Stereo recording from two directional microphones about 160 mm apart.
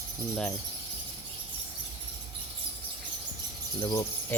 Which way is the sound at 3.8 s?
20° left (ahead or behind).